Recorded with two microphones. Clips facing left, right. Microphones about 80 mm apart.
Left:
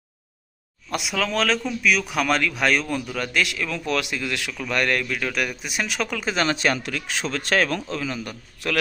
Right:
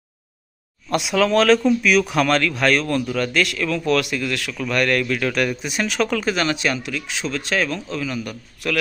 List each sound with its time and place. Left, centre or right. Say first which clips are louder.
0.9 s speech: right 7 dB; centre
6.3 s speech: right 1 dB; left